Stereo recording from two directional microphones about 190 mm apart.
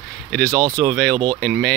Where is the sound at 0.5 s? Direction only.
20° right (ahead or behind).